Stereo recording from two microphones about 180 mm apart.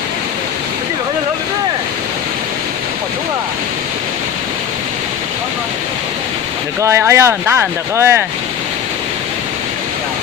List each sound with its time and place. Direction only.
6.8 s speech: 15° right (ahead or behind)